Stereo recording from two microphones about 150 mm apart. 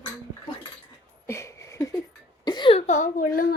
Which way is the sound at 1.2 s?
20° left (ahead or behind).